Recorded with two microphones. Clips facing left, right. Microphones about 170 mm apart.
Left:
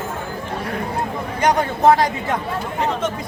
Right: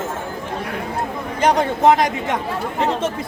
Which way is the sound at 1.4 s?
25° right (ahead or behind).